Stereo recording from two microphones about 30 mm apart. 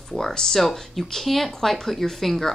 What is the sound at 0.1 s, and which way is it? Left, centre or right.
Speech, centre.